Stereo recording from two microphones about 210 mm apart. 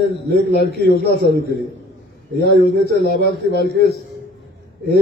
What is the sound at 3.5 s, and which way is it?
Speech, 55° right (ahead or behind).